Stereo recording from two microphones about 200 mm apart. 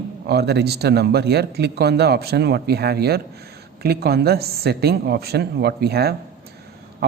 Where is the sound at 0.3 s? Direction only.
55° right (ahead or behind).